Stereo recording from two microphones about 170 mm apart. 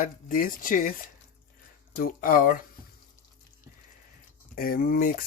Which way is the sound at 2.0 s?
55° left (ahead or behind).